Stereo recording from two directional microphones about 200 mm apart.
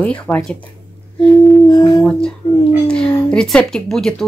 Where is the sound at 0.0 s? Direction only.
10° left (ahead or behind).